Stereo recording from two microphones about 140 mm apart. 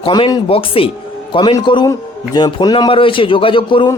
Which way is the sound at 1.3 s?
30° left (ahead or behind).